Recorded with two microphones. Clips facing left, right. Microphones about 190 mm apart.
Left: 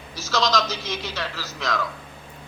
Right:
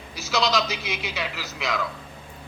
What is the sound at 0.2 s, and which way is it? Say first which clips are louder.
A man's voice: left 1 dB; 15° right (ahead or behind).